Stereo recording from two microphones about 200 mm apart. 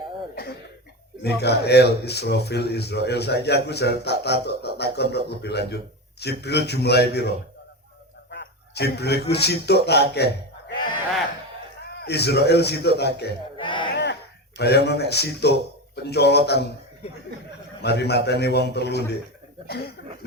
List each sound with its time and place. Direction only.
1.2 s speech: 55° left (ahead or behind)
8.3 s quack: 60° left (ahead or behind)
9.3 s speech: 55° left (ahead or behind)
11.9 s speech: 55° left (ahead or behind)
13.6 s a sound: 25° left (ahead or behind)
13.9 s a sound: 60° left (ahead or behind)
16.0 s speech: 55° left (ahead or behind)
17.8 s speech: 55° left (ahead or behind)